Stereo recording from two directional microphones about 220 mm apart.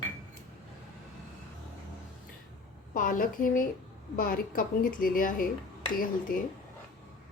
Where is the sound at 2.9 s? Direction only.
40° left (ahead or behind).